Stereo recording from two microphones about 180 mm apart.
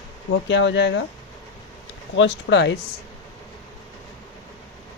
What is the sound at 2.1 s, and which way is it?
Speech, 85° left.